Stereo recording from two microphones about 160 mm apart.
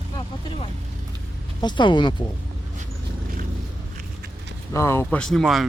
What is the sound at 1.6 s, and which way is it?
Speech, 30° left (ahead or behind).